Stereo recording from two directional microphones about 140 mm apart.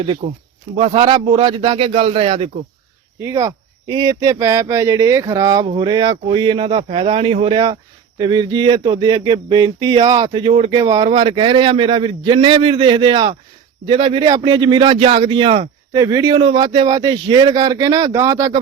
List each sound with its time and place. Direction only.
0.2 s speech: 40° right (ahead or behind)
3.2 s speech: 20° right (ahead or behind)
15.9 s speech: 25° right (ahead or behind)